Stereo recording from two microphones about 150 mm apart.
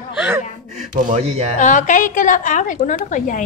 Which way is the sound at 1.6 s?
55° left (ahead or behind).